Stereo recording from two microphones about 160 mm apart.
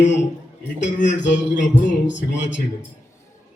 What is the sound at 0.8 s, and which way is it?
A man's voice, 50° left (ahead or behind).